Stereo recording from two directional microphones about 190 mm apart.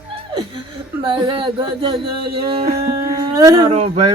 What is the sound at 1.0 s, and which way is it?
Speech, 25° right (ahead or behind).